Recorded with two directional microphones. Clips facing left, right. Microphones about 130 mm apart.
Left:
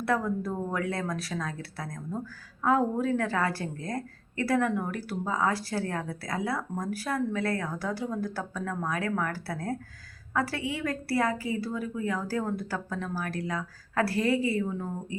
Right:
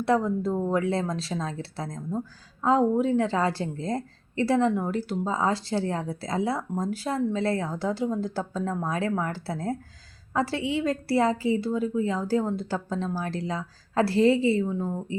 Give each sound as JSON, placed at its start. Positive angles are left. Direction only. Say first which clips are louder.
{"t": 0.0, "sound": "a woman's voice", "louder": "right 4 dB", "side_deg": -25}